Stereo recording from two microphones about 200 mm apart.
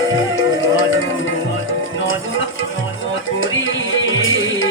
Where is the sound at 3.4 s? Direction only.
70° left (ahead or behind).